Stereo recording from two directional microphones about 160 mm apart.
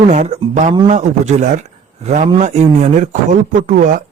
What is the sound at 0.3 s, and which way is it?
Speech, 40° right (ahead or behind).